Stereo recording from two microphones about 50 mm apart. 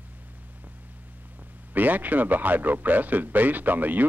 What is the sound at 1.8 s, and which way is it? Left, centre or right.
Speech, right.